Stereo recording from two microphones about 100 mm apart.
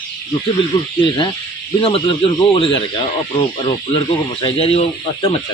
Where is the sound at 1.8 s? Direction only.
75° left (ahead or behind).